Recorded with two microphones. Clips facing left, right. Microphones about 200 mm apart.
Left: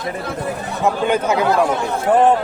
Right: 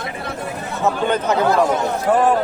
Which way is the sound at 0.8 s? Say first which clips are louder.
Left 1 dB; 10° left (ahead or behind).